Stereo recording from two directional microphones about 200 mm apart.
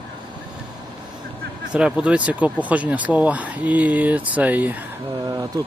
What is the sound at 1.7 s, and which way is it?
Speech, 5° right (ahead or behind).